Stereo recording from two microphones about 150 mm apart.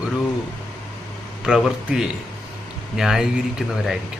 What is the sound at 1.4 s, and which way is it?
A man's voice, 5° right (ahead or behind).